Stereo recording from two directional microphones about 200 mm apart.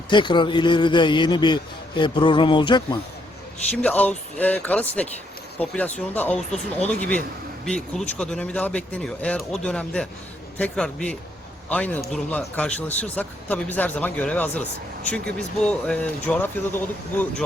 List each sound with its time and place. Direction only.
0.1 s a man's voice: 25° left (ahead or behind)
3.7 s a man's voice: 5° left (ahead or behind)
7.6 s a man's voice: 5° left (ahead or behind)